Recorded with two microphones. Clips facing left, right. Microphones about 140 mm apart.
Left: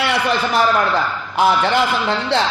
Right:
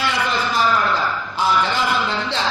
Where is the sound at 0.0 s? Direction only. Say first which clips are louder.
Left 3 dB; 60° left (ahead or behind).